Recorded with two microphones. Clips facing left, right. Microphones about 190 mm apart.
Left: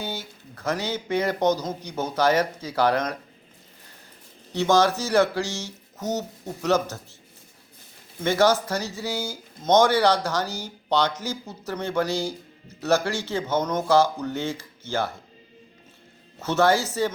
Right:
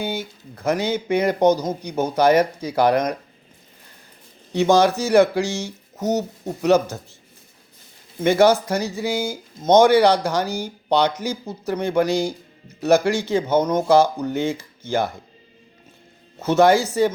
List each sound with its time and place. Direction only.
0.0 s speech: 15° right (ahead or behind)
4.5 s speech: 15° right (ahead or behind)
8.2 s speech: 15° right (ahead or behind)
16.4 s speech: 15° right (ahead or behind)